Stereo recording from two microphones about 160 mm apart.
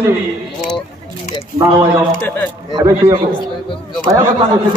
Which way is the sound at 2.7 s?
25° right (ahead or behind).